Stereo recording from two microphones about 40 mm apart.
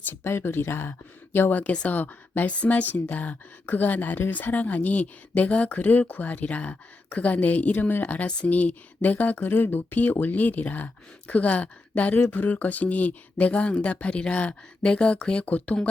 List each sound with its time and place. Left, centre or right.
0.1 s speech: left
1.9 s speech: left
2.5 s speech: left
2.8 s speech: left
8.4 s speech: left
9.5 s speech: left